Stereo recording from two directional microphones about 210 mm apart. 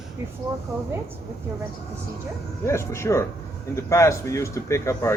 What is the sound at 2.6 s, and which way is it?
Speech, 15° left (ahead or behind).